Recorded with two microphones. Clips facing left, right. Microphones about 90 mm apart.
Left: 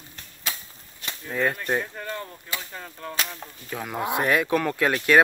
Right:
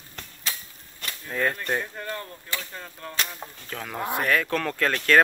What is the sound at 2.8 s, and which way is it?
Speech, 5° left (ahead or behind).